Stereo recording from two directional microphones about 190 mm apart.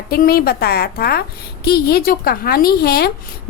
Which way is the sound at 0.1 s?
55° left (ahead or behind).